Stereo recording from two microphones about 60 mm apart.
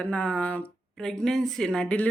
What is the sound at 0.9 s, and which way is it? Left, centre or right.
Speech, centre.